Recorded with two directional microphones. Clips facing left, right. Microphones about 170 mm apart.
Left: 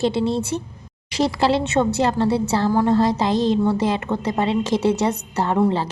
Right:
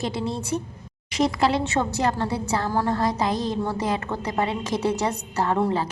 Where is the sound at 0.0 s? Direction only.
25° left (ahead or behind).